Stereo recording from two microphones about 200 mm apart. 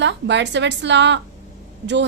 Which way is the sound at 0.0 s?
60° right (ahead or behind).